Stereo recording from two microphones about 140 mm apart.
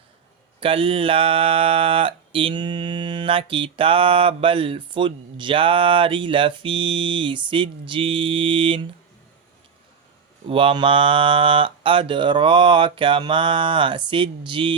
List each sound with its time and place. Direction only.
0.6 s speech: 40° right (ahead or behind)
10.4 s speech: 40° right (ahead or behind)